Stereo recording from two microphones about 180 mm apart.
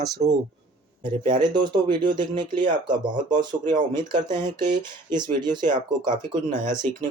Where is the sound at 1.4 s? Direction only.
25° right (ahead or behind).